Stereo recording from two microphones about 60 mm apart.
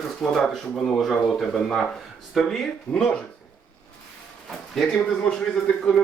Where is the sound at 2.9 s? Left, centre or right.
Centre.